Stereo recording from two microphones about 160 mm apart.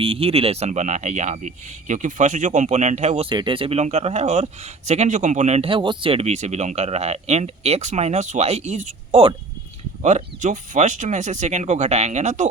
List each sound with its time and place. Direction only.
0.0 s speech: 35° right (ahead or behind)
3.2 s speech: 30° right (ahead or behind)